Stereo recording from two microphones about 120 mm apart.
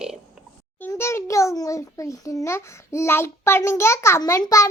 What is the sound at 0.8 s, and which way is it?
A child's voice, 20° left (ahead or behind).